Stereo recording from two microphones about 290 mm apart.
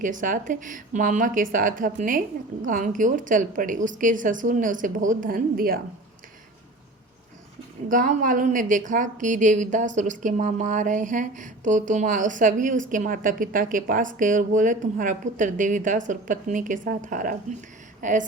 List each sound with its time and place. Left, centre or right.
0.0 s a woman's voice: right
7.9 s a woman's voice: right